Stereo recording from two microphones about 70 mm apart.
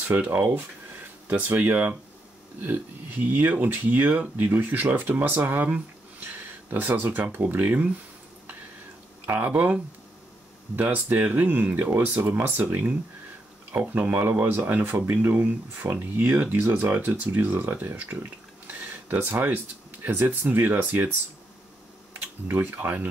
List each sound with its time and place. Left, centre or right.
1.3 s speech: right
3.3 s speech: right
9.2 s speech: right
10.8 s speech: right
19.0 s speech: right
22.1 s speech: right